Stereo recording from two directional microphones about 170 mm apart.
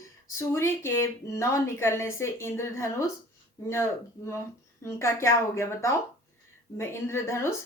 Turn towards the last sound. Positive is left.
turn(degrees=15)  # may be behind; listen again after turning